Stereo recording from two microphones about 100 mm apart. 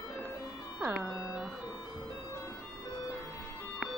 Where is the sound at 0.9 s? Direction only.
Centre (ahead or behind).